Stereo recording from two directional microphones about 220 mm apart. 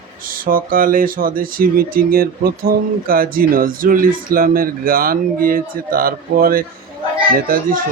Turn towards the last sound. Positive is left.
turn(degrees=-40)  # may be behind; listen again after turning